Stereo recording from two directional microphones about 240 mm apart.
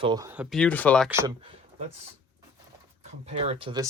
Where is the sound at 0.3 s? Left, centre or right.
Centre.